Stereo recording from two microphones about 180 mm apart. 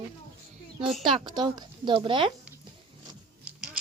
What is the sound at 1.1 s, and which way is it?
Speech, 25° right (ahead or behind).